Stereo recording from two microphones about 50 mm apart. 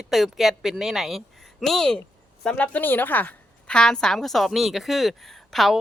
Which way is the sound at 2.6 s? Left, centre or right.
Left.